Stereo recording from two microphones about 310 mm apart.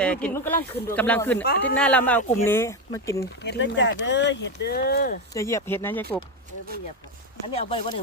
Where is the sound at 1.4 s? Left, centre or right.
Left.